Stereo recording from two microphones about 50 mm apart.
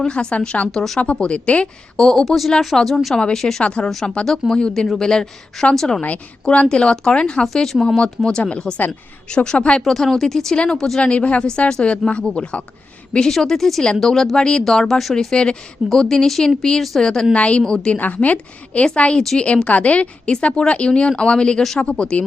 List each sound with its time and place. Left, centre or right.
0.1 s a woman's voice: left
0.7 s a woman's voice: centre
2.0 s speech: centre
2.2 s speech: centre
3.6 s a woman's voice: left
4.3 s speech: centre
6.5 s a woman's voice: left
7.4 s a woman's voice: centre
9.8 s speech: centre
11.0 s a woman's voice: left; by 14.3 s centre
14.3 s speech: centre
14.6 s speech: centre
17.3 s a woman's voice: left
18.0 s a woman's voice: left